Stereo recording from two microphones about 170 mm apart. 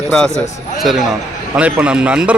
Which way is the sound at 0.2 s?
Centre (ahead or behind).